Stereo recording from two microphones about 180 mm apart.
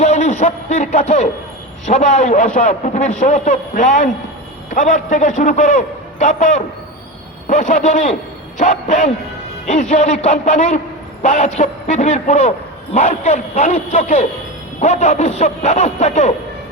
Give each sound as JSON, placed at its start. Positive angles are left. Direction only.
{"t": 0.0, "sound": "a man's voice", "side_deg": 40}